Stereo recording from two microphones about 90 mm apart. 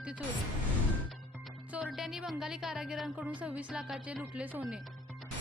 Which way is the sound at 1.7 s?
15° right (ahead or behind).